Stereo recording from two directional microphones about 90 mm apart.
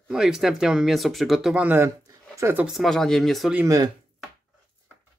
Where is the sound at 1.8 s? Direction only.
30° right (ahead or behind).